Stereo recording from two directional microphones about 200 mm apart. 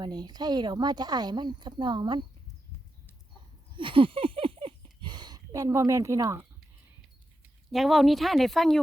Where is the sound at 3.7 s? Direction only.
25° right (ahead or behind).